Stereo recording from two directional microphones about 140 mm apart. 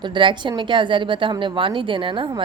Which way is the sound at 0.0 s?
35° right (ahead or behind).